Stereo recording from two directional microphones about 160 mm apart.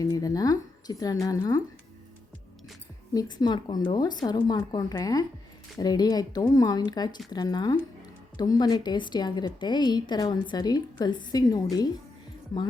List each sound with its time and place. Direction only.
0.0 s a woman's voice: 20° left (ahead or behind)
3.1 s a woman's voice: 25° left (ahead or behind)